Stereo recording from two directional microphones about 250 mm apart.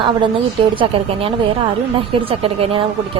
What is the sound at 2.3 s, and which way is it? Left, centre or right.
Speech, right.